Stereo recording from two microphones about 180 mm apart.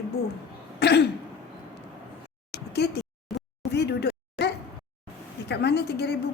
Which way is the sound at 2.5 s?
65° left (ahead or behind).